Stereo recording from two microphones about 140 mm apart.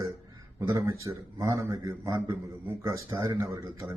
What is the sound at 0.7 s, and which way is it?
A man's voice, 25° right (ahead or behind).